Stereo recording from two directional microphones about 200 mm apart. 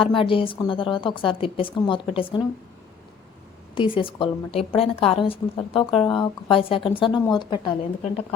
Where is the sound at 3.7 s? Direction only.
25° left (ahead or behind).